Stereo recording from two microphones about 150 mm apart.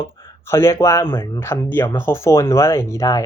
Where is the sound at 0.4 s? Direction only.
15° left (ahead or behind).